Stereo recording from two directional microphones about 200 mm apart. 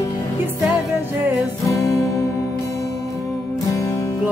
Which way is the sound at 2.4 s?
15° left (ahead or behind).